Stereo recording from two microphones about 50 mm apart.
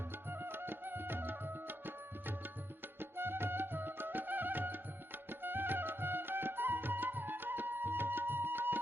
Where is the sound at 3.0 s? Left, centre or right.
Right.